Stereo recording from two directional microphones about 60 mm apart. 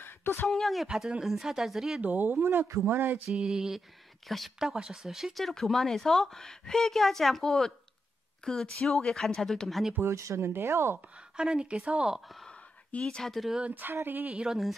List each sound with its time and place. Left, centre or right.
0.0 s a sound: left
0.5 s speech: centre
0.8 s speech: centre
2.0 s speech: right
3.3 s speech: centre
10.0 s speech: right
10.4 s speech: right
11.3 s speech: centre
12.4 s a sound: centre
13.7 s speech: right
14.3 s speech: centre